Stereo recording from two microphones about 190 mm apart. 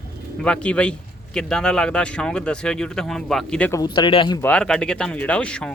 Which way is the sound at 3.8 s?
25° left (ahead or behind).